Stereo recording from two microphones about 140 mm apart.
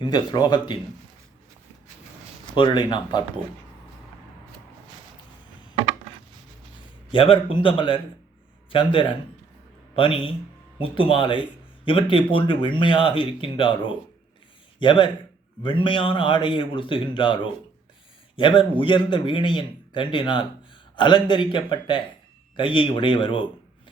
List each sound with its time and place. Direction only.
0.0 s a man's voice: 30° left (ahead or behind)
2.6 s a man's voice: 35° left (ahead or behind)
7.1 s a man's voice: 40° left (ahead or behind)